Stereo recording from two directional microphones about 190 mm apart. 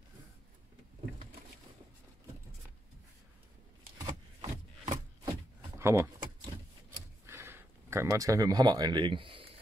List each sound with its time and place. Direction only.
4.0 s rub: 20° right (ahead or behind)
5.8 s power windows: 15° right (ahead or behind)
7.2 s speech: 15° right (ahead or behind); by 9.5 s 30° right (ahead or behind)